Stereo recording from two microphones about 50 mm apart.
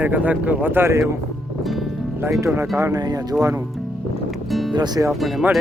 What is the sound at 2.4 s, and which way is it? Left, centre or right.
Speech, right.